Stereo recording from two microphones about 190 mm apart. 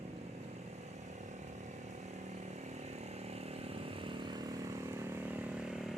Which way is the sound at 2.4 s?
35° right (ahead or behind).